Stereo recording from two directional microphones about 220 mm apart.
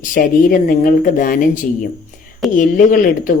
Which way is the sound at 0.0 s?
40° left (ahead or behind).